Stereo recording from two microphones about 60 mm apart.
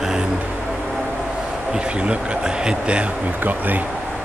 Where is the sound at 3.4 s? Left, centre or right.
Right.